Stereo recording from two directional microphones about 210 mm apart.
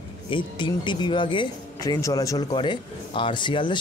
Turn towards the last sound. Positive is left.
turn(degrees=20)  # may be behind; listen again after turning